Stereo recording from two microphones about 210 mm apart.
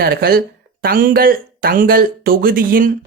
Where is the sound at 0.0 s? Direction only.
45° right (ahead or behind).